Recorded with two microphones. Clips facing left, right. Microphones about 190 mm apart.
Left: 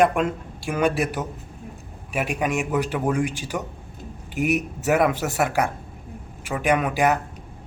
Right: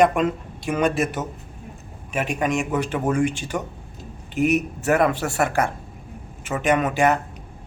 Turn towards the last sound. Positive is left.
turn(degrees=0)  # may be behind; listen again after turning